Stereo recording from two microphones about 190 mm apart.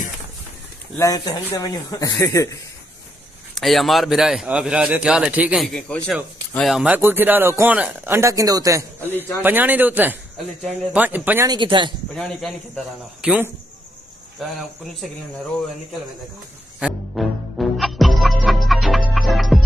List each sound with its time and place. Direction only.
0.9 s speech: 20° left (ahead or behind)
3.5 s a man's voice: centre (ahead or behind)
11.5 s speech: 25° right (ahead or behind)
12.1 s a man's voice: centre (ahead or behind)
16.8 s music: centre (ahead or behind)